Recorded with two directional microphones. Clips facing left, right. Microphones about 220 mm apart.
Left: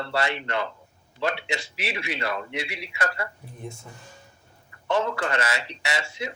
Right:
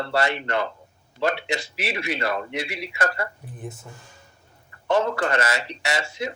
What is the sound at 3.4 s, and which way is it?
Speech, 5° right (ahead or behind).